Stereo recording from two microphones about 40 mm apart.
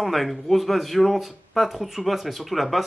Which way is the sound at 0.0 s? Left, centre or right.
Centre.